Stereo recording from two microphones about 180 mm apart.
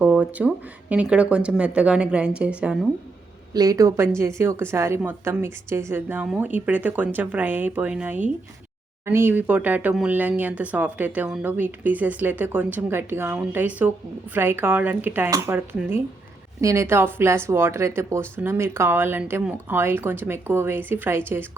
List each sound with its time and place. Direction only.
0.0 s speech: 5° right (ahead or behind)
3.5 s speech: 20° right (ahead or behind)